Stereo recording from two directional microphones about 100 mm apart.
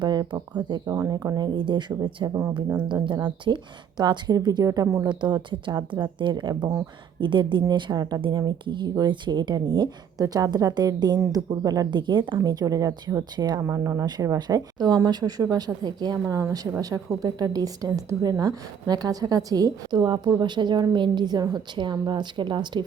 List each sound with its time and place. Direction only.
0.0 s a sound: 45° right (ahead or behind)
0.9 s speech: 30° right (ahead or behind)
1.5 s speech: 55° right (ahead or behind)
2.2 s speech: 35° right (ahead or behind)
2.9 s speech: 55° right (ahead or behind); by 5.0 s 30° right (ahead or behind)
5.0 s speech: 50° right (ahead or behind)
7.2 s speech: 55° right (ahead or behind)
12.5 s speech: 40° right (ahead or behind)
13.6 s speech: 30° right (ahead or behind); by 22.8 s 50° right (ahead or behind)